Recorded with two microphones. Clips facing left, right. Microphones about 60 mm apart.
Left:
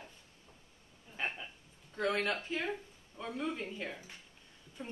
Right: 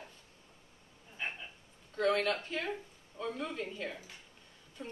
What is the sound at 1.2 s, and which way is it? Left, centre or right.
Speech, left.